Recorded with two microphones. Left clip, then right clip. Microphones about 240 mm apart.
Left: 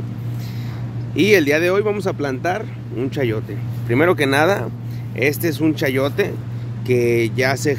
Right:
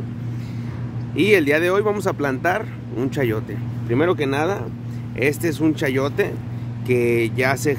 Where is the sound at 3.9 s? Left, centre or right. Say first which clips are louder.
Left 4 dB; centre.